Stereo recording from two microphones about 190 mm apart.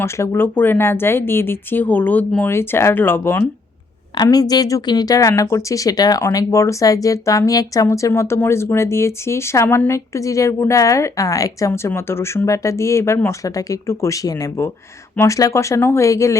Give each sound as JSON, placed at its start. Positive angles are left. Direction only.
{"t": 0.0, "sound": "a woman's voice", "side_deg": 15}